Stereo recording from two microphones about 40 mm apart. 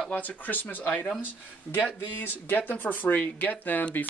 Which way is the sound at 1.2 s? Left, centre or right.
Left.